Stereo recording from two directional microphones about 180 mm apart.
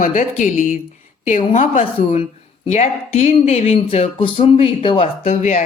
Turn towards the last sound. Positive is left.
turn(degrees=35)  # may be behind; listen again after turning